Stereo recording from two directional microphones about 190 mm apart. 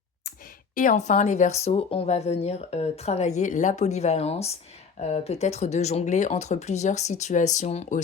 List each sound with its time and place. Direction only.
0.8 s speech: 40° left (ahead or behind)